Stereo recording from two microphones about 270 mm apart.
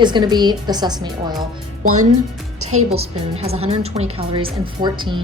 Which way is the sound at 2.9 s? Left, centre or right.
Right.